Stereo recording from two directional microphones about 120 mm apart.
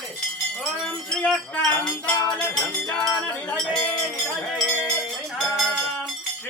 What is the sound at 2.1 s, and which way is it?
Music, 35° left (ahead or behind).